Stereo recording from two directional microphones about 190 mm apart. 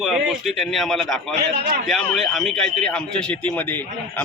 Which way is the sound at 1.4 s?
60° right (ahead or behind).